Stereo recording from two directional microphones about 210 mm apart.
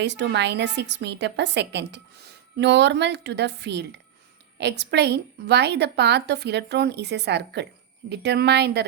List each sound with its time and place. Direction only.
0.0 s a woman's voice: 55° right (ahead or behind)